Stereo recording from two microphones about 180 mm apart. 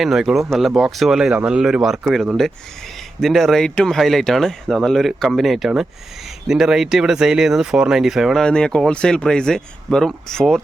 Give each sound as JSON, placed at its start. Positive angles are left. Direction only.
{"t": 0.0, "sound": "speech", "side_deg": 0}